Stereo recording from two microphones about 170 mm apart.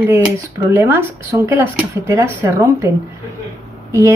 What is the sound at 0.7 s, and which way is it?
Speech, 15° right (ahead or behind).